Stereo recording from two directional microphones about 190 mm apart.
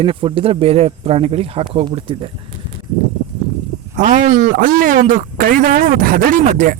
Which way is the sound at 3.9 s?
40° right (ahead or behind).